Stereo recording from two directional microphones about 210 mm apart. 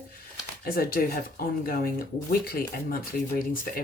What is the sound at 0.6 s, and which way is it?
Speech, 45° left (ahead or behind).